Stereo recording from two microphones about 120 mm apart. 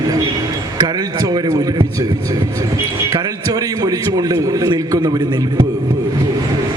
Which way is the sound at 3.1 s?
30° right (ahead or behind).